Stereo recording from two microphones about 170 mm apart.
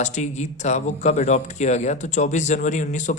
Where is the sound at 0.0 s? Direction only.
45° left (ahead or behind).